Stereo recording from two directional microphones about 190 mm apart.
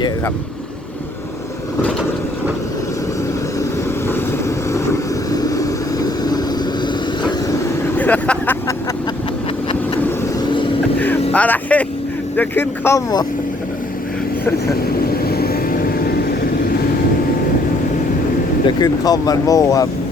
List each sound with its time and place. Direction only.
4.1 s vehicle: 15° left (ahead or behind)
7.9 s vehicle: 10° left (ahead or behind)
11.3 s vehicle: 10° left (ahead or behind)
12.4 s speech: 10° left (ahead or behind)
15.0 s vehicle: 50° left (ahead or behind)
18.8 s speech: 20° left (ahead or behind)